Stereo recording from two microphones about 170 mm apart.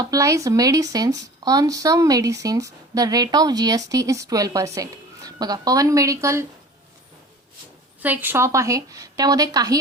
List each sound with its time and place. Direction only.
0.0 s speech: 20° right (ahead or behind)
8.0 s speech: 10° right (ahead or behind)